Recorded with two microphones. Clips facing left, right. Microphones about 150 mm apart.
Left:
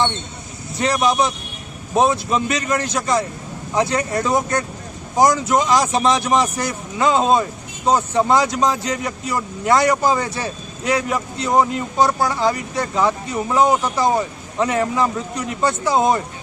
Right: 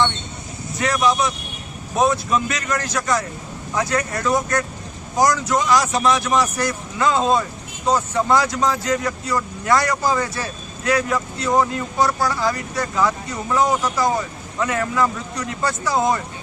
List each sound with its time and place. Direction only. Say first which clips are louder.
0.8 s speech: left 1 dB; 30° left (ahead or behind)